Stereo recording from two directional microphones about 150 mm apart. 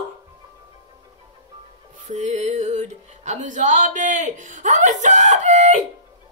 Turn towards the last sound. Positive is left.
turn(degrees=-50)  # may be behind; listen again after turning